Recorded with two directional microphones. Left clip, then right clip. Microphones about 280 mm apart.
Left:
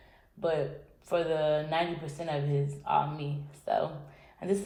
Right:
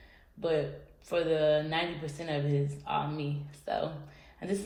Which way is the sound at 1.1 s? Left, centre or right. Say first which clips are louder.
Right 1 dB; centre.